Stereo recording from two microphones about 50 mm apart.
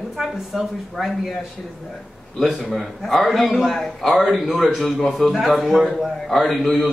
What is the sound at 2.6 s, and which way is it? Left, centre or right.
A man's voice, centre.